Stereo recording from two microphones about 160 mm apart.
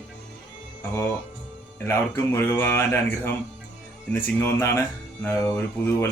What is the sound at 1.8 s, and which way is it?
Speech, 15° left (ahead or behind).